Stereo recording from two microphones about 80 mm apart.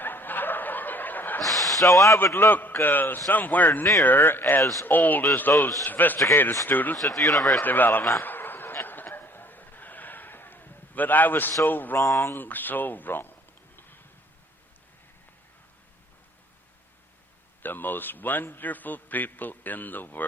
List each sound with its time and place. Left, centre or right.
0.0 s snicker: left
1.4 s a sound: centre
1.8 s speech: left
2.1 s a man's voice: left
6.9 s speech: centre
7.2 s speech: left
7.6 s a man's voice: left
8.2 s a sound: left
11.6 s a man's voice: left
11.9 s speech: left
12.3 s a man's voice: left
13.7 s a sound: left
17.6 s a man's voice: left